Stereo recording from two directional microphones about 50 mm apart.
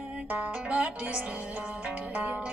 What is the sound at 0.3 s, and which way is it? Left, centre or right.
Music, right.